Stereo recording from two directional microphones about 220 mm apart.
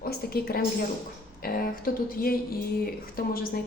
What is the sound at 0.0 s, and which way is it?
A woman's voice, 45° left (ahead or behind).